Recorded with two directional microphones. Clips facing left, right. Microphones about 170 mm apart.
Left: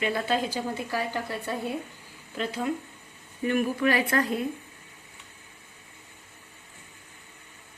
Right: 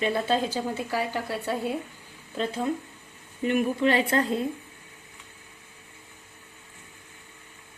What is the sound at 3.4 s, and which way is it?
A woman's voice, 20° right (ahead or behind).